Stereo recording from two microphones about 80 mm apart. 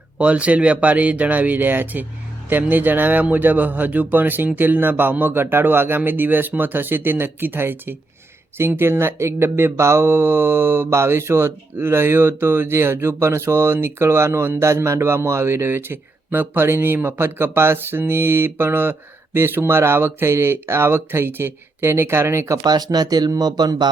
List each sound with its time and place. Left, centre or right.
0.2 s speech: centre; by 22.5 s right
22.5 s speech: right